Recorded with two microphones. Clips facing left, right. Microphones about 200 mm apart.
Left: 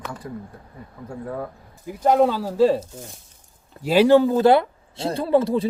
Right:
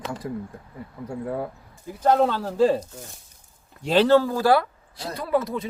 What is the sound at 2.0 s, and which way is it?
Speech, 10° left (ahead or behind).